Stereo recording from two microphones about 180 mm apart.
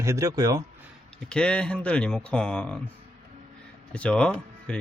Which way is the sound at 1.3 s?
5° left (ahead or behind).